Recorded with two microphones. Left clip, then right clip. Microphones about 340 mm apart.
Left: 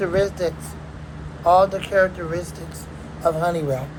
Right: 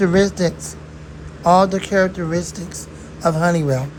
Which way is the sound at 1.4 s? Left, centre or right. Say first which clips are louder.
Right 2 dB; right.